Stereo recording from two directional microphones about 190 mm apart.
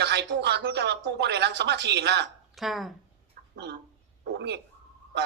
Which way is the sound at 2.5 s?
Centre (ahead or behind).